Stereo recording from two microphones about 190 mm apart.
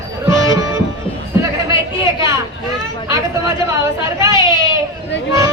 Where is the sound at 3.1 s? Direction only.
15° right (ahead or behind).